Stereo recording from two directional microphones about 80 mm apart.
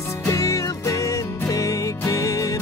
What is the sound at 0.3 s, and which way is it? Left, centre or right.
Music, left.